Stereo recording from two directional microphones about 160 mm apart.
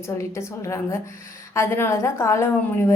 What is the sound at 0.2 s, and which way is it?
A woman's voice, 20° left (ahead or behind).